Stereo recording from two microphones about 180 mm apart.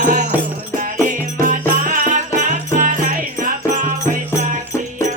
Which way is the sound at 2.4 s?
45° right (ahead or behind).